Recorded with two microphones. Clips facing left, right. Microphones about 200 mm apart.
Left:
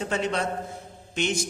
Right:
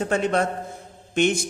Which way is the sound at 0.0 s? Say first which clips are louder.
Right 5 dB; 50° right (ahead or behind).